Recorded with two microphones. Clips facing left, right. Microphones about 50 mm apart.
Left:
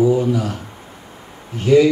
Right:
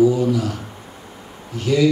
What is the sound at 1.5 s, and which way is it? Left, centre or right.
Speech, left.